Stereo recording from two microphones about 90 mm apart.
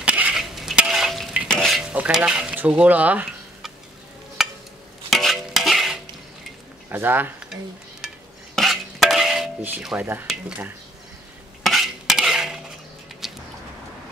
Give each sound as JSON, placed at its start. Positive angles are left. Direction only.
{"t": 0.0, "sound": "dishes", "side_deg": -15}
{"t": 0.4, "sound": "a sound", "side_deg": -5}
{"t": 1.5, "sound": "stir", "side_deg": 5}
{"t": 1.8, "sound": "dishes", "side_deg": -10}
{"t": 4.4, "sound": "a sound", "side_deg": -5}
{"t": 5.1, "sound": "stir", "side_deg": 0}
{"t": 6.9, "sound": "speech", "side_deg": -25}
{"t": 8.5, "sound": "dishes", "side_deg": 0}
{"t": 11.6, "sound": "cutlery", "side_deg": 0}
{"t": 13.2, "sound": "a sound", "side_deg": 0}